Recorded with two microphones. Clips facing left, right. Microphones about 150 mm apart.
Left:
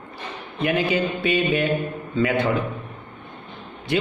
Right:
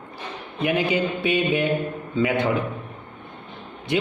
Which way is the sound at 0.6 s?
15° right (ahead or behind).